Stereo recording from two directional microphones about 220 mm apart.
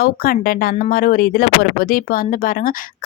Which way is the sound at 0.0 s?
40° left (ahead or behind).